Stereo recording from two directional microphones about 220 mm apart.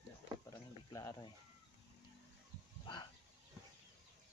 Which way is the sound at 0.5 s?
15° left (ahead or behind).